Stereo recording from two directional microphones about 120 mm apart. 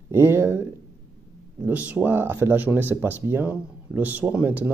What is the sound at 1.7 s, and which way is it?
Speech, 15° right (ahead or behind).